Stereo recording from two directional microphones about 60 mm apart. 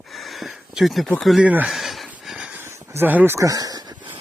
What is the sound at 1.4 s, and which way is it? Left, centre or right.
Speech, right.